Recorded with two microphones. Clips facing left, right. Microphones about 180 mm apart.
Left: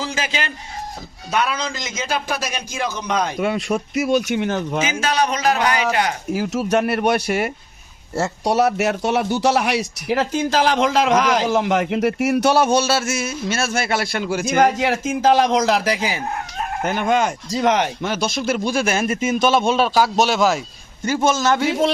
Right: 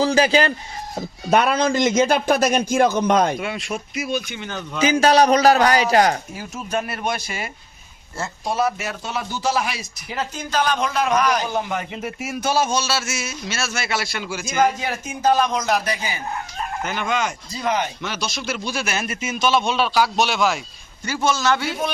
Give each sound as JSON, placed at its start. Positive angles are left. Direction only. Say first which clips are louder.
{"t": 0.0, "sound": "a man's voice", "louder": "right 9 dB", "side_deg": -35}
{"t": 1.3, "sound": "a man's voice", "louder": "right 5 dB", "side_deg": -50}
{"t": 3.4, "sound": "a man's voice", "louder": "left 7 dB", "side_deg": 45}
{"t": 4.0, "sound": "speech", "louder": "left 8 dB", "side_deg": 70}
{"t": 4.8, "sound": "a man's voice", "louder": "right 9 dB", "side_deg": -35}
{"t": 6.3, "sound": "speech", "louder": "left 8 dB", "side_deg": 80}
{"t": 16.8, "sound": "a man's voice", "louder": "left 6 dB", "side_deg": 50}
{"t": 17.5, "sound": "speech", "louder": "left 6 dB", "side_deg": 80}
{"t": 18.0, "sound": "a man's voice", "louder": "left 6 dB", "side_deg": 50}
{"t": 19.0, "sound": "a man's voice", "louder": "left 8 dB", "side_deg": 30}
{"t": 19.3, "sound": "a man's voice", "louder": "left 2 dB", "side_deg": 50}
{"t": 21.7, "sound": "a man's voice", "louder": "left 7 dB", "side_deg": 90}